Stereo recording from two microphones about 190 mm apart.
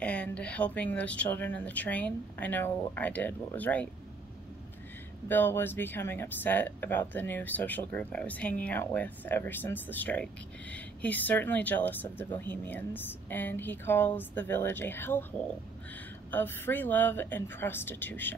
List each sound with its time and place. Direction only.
0.0 s speech: 5° left (ahead or behind)
5.3 s speech: 10° left (ahead or behind)
16.3 s speech: 10° left (ahead or behind)